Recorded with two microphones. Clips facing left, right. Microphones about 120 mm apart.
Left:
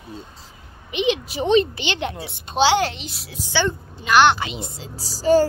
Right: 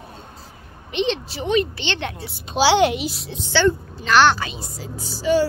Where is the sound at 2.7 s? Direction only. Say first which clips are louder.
Right 4 dB; 15° right (ahead or behind).